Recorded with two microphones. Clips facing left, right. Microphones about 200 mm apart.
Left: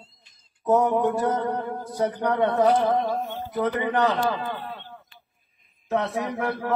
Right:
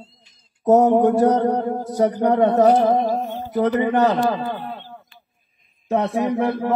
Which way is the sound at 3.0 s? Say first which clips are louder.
Right 5 dB; 30° right (ahead or behind).